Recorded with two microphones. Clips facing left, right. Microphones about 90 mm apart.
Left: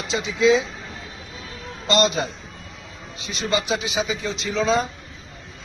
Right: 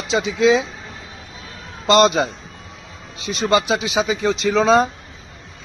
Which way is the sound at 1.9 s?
75° right (ahead or behind).